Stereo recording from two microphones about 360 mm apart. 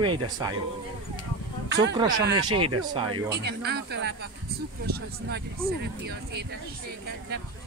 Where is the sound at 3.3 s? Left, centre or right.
Right.